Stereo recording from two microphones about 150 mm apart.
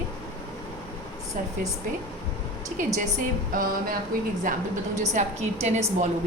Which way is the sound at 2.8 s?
55° right (ahead or behind).